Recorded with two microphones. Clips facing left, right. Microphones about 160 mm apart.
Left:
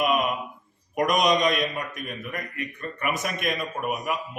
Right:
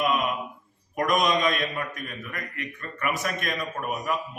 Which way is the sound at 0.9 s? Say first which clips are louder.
Left 2 dB; 15° left (ahead or behind).